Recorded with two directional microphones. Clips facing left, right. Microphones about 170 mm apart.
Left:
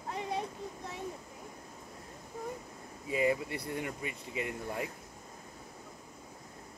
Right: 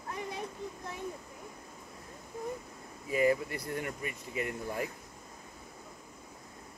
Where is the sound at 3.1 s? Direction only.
25° left (ahead or behind).